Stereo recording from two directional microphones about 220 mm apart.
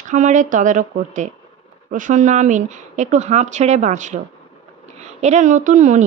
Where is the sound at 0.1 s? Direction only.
35° right (ahead or behind).